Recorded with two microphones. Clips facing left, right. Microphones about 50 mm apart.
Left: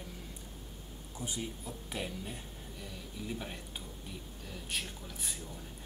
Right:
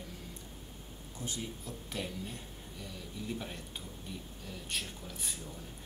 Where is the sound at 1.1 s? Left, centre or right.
Centre.